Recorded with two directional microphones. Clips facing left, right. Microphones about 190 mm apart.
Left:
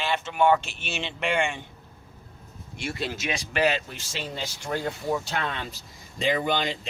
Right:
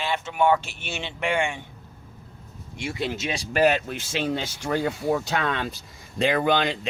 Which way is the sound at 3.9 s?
60° right (ahead or behind).